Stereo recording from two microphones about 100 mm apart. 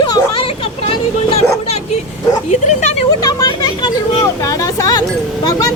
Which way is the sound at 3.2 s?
45° left (ahead or behind).